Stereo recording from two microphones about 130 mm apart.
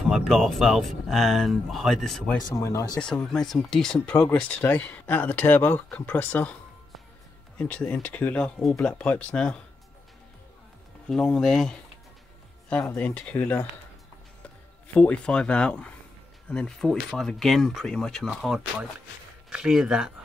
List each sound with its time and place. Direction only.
0.0 s speech: centre (ahead or behind)
2.4 s speech: 25° left (ahead or behind)
3.0 s speech: 5° left (ahead or behind)
11.1 s speech: 5° left (ahead or behind)
15.0 s speech: 10° left (ahead or behind)